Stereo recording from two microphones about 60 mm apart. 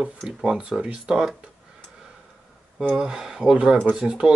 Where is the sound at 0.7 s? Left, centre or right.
Centre.